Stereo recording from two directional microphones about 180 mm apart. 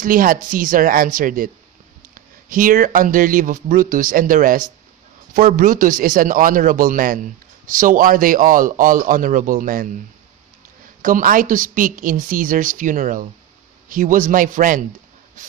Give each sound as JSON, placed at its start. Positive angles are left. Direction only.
{"t": 0.0, "sound": "a man's voice", "side_deg": -50}
{"t": 11.0, "sound": "a man's voice", "side_deg": -50}